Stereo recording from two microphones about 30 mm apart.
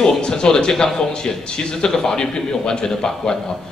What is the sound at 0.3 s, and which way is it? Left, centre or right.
A man's voice, centre.